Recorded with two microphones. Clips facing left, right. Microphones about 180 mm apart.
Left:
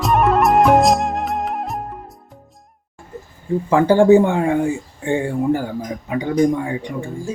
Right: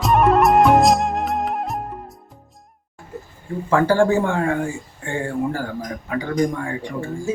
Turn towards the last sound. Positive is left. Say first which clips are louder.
# left 2 dB
turn(degrees=20)  # may be behind; listen again after turning